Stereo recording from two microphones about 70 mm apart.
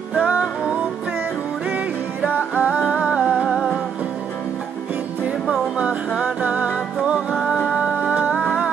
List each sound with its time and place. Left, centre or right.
0.1 s music: centre
2.2 s music: centre
5.8 s music: centre